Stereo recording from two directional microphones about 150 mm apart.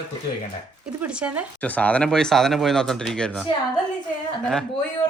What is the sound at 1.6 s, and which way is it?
Speech, 10° left (ahead or behind).